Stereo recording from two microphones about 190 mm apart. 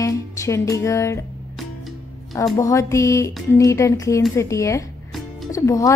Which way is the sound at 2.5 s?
15° left (ahead or behind).